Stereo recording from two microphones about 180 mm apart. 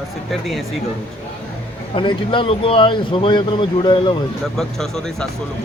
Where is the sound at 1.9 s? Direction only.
30° left (ahead or behind).